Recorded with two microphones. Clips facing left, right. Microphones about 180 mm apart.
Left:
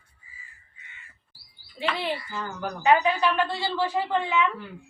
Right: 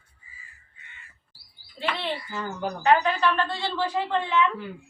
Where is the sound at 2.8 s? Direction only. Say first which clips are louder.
Even; 10° left (ahead or behind).